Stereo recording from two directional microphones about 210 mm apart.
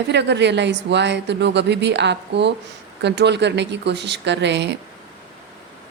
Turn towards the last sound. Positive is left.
turn(degrees=-55)  # may be behind; listen again after turning